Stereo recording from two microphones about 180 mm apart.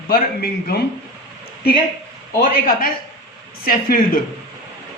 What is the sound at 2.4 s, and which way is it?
A woman's voice, 50° left (ahead or behind).